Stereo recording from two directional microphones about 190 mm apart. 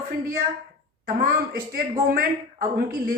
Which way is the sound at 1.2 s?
50° right (ahead or behind).